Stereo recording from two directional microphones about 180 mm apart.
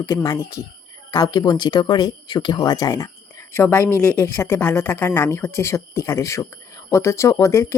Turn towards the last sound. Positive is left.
turn(degrees=15)  # may be behind; listen again after turning